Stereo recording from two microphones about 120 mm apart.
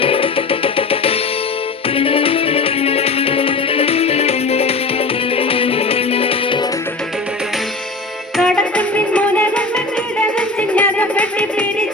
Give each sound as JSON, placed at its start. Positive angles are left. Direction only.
{"t": 0.0, "sound": "music", "side_deg": 50}
{"t": 8.4, "sound": "music", "side_deg": 10}